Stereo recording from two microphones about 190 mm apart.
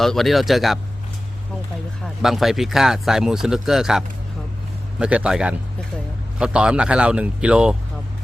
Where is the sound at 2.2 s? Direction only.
Centre (ahead or behind).